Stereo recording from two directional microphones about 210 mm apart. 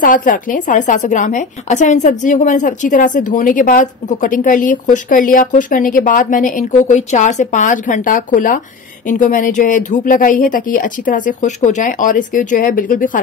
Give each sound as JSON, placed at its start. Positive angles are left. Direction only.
{"t": 0.0, "sound": "a woman's voice", "side_deg": 40}